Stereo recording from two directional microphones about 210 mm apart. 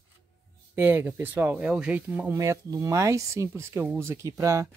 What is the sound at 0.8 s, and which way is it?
Speech, 10° right (ahead or behind).